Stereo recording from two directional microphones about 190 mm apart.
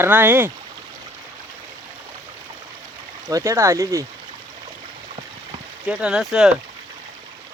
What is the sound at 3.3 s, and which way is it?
Speech, 15° right (ahead or behind).